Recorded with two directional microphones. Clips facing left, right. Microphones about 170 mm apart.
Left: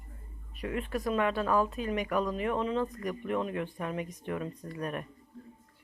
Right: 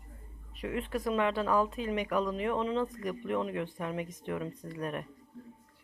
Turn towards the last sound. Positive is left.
turn(degrees=-20)  # may be behind; listen again after turning